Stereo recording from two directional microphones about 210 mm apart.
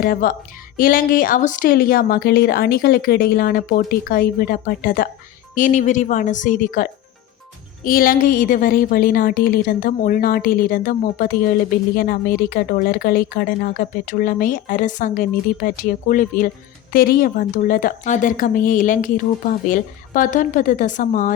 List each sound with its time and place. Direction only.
0.0 s a woman's voice: 45° left (ahead or behind)
7.9 s a woman's voice: 45° left (ahead or behind)